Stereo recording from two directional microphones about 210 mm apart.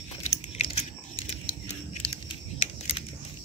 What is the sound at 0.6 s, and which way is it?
Biting, 30° left (ahead or behind).